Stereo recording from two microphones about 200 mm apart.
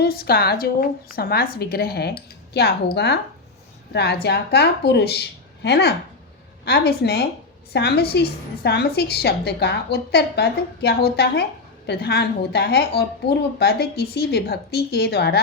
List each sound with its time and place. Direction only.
0.0 s a woman's voice: 50° left (ahead or behind)